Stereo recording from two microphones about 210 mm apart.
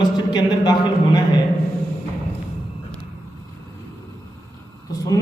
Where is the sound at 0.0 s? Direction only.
20° left (ahead or behind).